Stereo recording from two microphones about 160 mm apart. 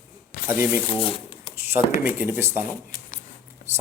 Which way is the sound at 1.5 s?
15° right (ahead or behind).